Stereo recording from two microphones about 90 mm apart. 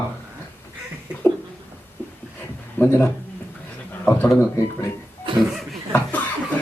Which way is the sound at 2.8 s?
30° left (ahead or behind).